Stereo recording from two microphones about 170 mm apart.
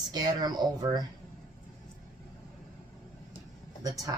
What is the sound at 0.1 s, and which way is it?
Speech, 25° right (ahead or behind).